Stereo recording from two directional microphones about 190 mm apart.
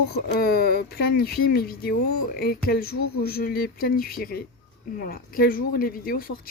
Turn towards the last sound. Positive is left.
turn(degrees=50)  # may be behind; listen again after turning